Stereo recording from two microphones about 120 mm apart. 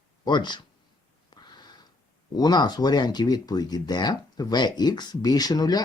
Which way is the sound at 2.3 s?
35° left (ahead or behind).